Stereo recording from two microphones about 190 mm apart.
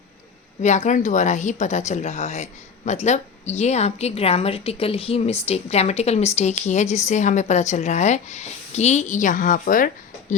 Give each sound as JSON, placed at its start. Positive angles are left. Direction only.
{"t": 0.6, "sound": "speech", "side_deg": 40}